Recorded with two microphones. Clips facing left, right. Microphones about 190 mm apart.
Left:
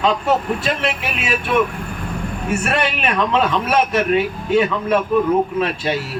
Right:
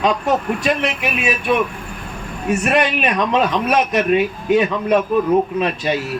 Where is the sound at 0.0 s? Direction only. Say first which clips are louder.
Even; 15° right (ahead or behind).